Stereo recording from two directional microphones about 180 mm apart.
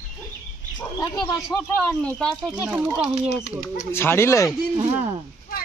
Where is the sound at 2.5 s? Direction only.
5° right (ahead or behind).